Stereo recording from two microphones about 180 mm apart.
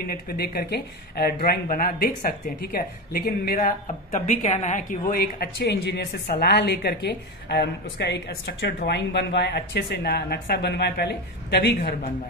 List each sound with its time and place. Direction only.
0.0 s speech: 55° left (ahead or behind)
3.8 s a woman's voice: 40° left (ahead or behind); by 11.9 s 65° left (ahead or behind)